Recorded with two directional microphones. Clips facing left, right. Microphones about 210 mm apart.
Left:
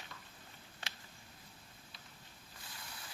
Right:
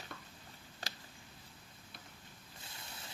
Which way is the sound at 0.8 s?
40° right (ahead or behind).